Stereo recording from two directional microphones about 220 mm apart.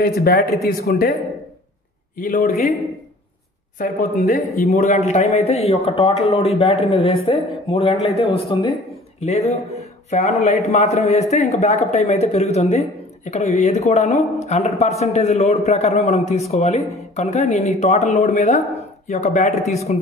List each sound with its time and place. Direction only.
0.2 s a man's voice: 45° left (ahead or behind)
2.1 s speech: 40° left (ahead or behind)
3.7 s speech: 35° left (ahead or behind)